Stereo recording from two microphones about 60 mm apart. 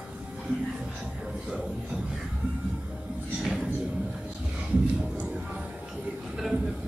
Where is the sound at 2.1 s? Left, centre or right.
Centre.